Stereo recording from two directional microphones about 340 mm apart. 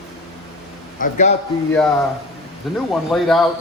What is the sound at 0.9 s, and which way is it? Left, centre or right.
Speech, left.